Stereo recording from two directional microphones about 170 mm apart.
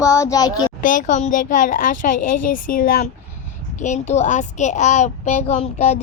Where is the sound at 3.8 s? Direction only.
40° left (ahead or behind).